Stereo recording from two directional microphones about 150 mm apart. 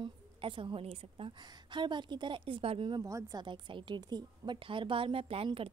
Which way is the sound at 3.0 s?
20° right (ahead or behind).